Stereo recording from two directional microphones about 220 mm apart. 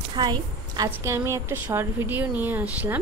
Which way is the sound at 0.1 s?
20° right (ahead or behind).